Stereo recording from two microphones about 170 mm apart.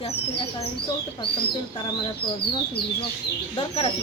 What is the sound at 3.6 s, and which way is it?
Speech, 35° left (ahead or behind).